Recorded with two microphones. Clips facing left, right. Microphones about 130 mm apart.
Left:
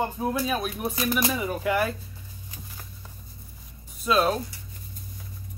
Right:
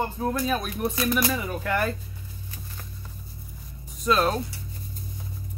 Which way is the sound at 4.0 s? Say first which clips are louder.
Even; 5° left (ahead or behind).